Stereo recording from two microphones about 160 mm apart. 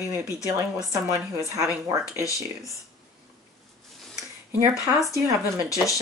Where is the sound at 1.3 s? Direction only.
20° right (ahead or behind).